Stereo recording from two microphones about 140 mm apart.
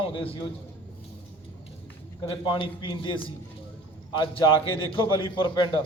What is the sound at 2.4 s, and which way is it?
A man's voice, 35° left (ahead or behind).